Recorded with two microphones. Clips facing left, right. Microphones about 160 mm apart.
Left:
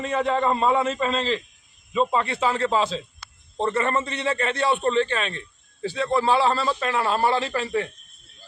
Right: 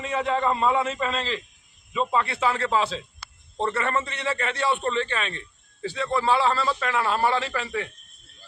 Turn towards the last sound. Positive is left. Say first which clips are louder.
# left 3 dB
turn(degrees=30)  # may be behind; listen again after turning